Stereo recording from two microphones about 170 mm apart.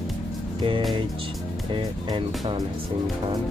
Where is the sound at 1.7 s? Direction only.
25° right (ahead or behind).